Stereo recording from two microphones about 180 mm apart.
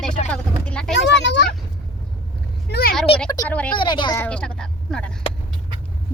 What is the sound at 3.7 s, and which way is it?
Speech, 25° left (ahead or behind).